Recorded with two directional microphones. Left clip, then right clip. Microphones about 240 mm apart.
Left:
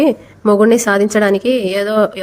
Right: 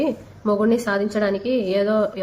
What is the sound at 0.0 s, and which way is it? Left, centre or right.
A woman's voice, left.